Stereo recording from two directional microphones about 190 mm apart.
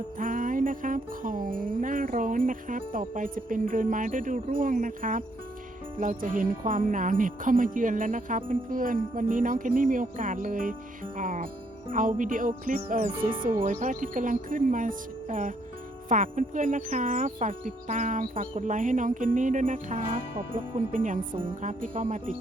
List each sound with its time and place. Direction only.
0.2 s jingle bell: 45° right (ahead or behind)
6.0 s speech: 45° right (ahead or behind)
21.6 s jingle bell: 40° right (ahead or behind)